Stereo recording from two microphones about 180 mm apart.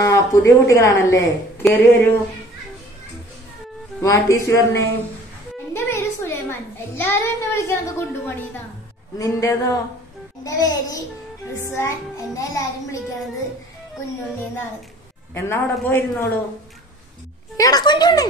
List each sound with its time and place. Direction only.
0.0 s a child's voice: 20° left (ahead or behind)
4.0 s a child's voice: 15° left (ahead or behind)
5.7 s music: 15° left (ahead or behind)
7.0 s a child's voice: 15° left (ahead or behind)
9.2 s a child's voice: 15° left (ahead or behind)
15.3 s a child's voice: 15° left (ahead or behind)
17.6 s speech: 20° left (ahead or behind)